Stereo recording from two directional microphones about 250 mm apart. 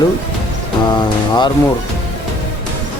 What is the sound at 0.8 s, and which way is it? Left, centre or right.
Speech, centre.